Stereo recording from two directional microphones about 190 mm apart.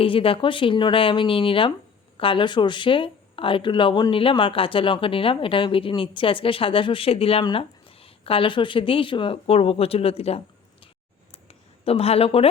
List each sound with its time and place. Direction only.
0.0 s speech: 30° left (ahead or behind)
11.9 s speech: 30° left (ahead or behind)